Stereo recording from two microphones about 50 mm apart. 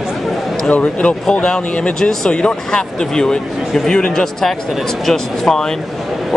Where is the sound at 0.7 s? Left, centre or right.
Left; by 5.6 s centre.